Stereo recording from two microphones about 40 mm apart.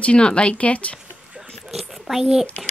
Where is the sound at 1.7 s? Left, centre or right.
Centre.